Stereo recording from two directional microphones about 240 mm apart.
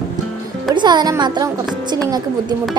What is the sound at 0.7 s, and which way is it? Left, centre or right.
A child's voice, centre.